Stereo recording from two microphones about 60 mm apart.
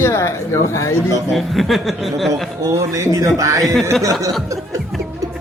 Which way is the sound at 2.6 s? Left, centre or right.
Right.